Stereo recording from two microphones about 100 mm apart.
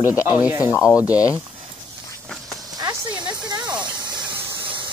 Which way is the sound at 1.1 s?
35° left (ahead or behind).